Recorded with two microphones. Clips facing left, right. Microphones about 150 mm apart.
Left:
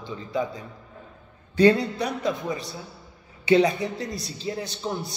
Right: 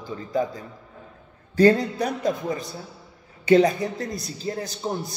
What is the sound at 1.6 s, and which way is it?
A man's voice, 45° right (ahead or behind).